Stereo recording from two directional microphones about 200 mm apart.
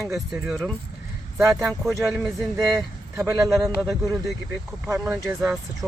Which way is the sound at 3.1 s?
15° right (ahead or behind).